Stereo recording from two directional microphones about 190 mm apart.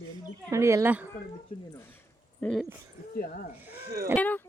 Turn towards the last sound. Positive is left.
turn(degrees=10)  # may be behind; listen again after turning